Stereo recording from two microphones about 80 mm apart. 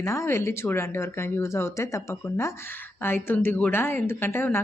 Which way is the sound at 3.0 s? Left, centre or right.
Left.